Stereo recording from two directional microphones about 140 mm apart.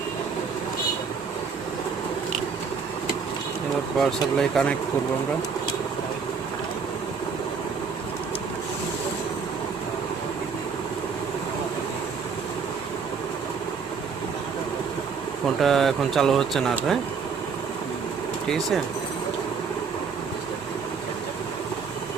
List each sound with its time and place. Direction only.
3.9 s speech: centre (ahead or behind)
15.6 s speech: centre (ahead or behind)
18.4 s speech: 5° left (ahead or behind)